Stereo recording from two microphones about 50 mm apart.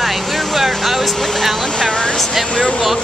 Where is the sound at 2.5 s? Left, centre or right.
Centre.